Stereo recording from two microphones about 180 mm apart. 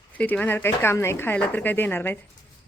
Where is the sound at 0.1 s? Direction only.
10° left (ahead or behind).